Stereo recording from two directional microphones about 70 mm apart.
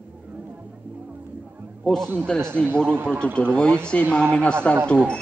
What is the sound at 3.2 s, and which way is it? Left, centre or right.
A man's voice, centre.